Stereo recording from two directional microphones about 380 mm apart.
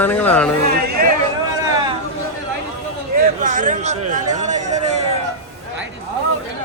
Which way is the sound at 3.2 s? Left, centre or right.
Right.